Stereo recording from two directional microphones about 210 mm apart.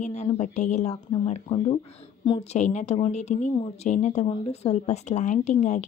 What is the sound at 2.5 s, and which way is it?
Speech, 35° left (ahead or behind).